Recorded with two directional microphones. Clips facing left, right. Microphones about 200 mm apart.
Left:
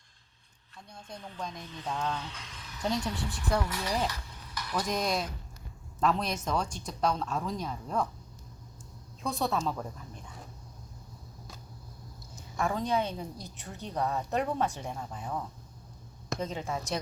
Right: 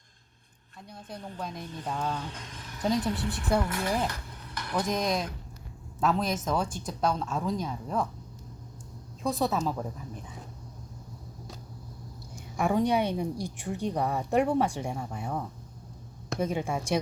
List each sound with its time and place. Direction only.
0.9 s speech: 5° right (ahead or behind)
2.1 s speech: 45° right (ahead or behind)
2.8 s speech: centre (ahead or behind)
3.6 s speech: 55° right (ahead or behind)
4.9 s speech: centre (ahead or behind)
9.2 s speech: centre (ahead or behind)
12.4 s a woman's voice: 15° right (ahead or behind)
16.4 s a woman's voice: 10° right (ahead or behind)